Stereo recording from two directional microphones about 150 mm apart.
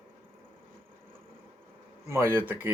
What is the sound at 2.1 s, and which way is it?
Speech, 15° right (ahead or behind).